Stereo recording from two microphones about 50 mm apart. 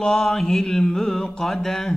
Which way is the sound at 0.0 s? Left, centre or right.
Centre.